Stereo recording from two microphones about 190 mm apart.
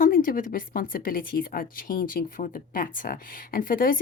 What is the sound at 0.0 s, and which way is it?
A woman's voice, 45° left (ahead or behind).